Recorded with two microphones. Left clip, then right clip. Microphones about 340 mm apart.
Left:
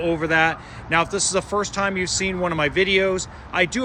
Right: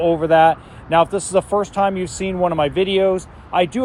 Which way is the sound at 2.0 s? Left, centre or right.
Centre.